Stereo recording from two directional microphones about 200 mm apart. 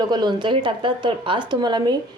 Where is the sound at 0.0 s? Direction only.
20° right (ahead or behind).